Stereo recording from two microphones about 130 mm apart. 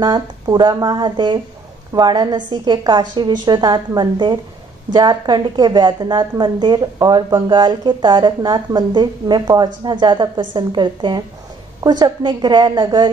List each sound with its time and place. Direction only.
0.0 s a woman's voice: 30° right (ahead or behind)